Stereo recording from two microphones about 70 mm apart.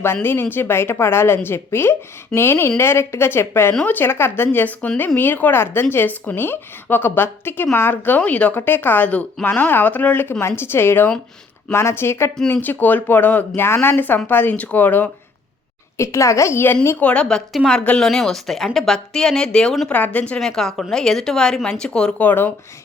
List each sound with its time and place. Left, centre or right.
0.0 s a woman's voice: left
12.5 s a woman's voice: left
13.6 s a woman's voice: left
16.0 s a child's voice: left
17.0 s a woman's voice: centre
19.9 s a woman's voice: left
20.4 s a woman's voice: centre
22.3 s a woman's voice: left